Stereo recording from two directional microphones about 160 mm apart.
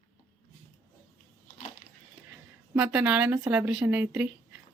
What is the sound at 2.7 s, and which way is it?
Speech, 5° right (ahead or behind).